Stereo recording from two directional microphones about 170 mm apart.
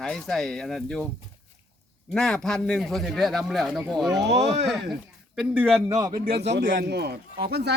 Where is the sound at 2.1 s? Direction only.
5° left (ahead or behind).